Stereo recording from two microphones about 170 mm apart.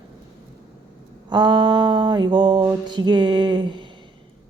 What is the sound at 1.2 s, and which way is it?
Mantra, 30° right (ahead or behind).